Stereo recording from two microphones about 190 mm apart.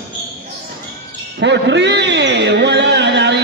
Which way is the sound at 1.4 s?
65° right (ahead or behind).